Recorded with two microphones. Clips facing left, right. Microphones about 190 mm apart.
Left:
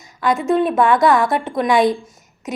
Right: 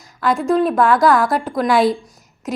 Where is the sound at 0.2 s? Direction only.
Centre (ahead or behind).